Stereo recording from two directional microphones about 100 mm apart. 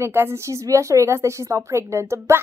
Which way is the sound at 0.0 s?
25° right (ahead or behind).